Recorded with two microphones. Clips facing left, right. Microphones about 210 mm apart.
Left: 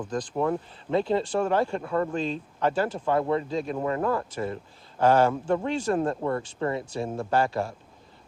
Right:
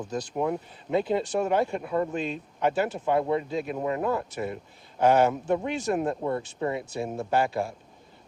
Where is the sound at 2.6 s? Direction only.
20° right (ahead or behind).